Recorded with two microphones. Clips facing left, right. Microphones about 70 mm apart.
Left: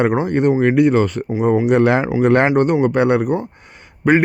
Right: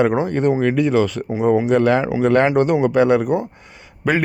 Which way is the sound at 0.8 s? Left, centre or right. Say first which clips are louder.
Left 3 dB; left.